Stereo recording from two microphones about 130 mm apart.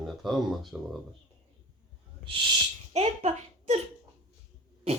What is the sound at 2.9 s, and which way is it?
Speech, 55° right (ahead or behind).